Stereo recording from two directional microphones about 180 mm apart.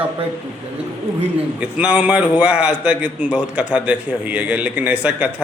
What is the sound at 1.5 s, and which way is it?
A man's voice, 5° right (ahead or behind).